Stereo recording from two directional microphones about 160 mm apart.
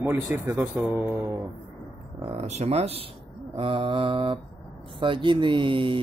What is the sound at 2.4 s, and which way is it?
Speech, 40° right (ahead or behind).